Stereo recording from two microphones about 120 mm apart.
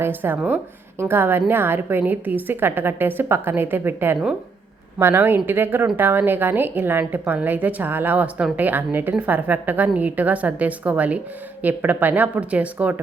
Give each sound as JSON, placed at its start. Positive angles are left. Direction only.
{"t": 0.0, "sound": "a woman's voice", "side_deg": -15}